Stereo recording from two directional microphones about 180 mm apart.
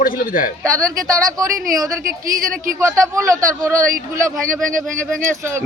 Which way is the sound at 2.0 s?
50° right (ahead or behind).